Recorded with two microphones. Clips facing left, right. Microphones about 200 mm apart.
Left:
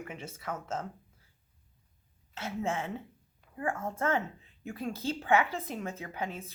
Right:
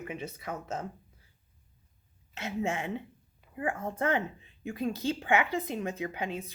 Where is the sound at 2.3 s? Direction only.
15° right (ahead or behind).